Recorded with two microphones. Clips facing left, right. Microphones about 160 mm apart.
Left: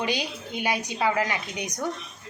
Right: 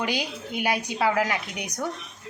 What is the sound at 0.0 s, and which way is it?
A woman's voice, 5° right (ahead or behind).